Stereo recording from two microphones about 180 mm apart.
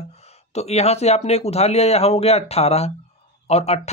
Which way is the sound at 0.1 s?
35° left (ahead or behind).